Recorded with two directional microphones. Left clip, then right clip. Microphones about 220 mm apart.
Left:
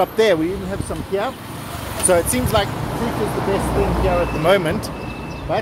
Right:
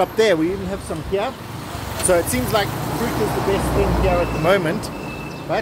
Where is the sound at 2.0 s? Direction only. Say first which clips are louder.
Left 1 dB; 20° left (ahead or behind).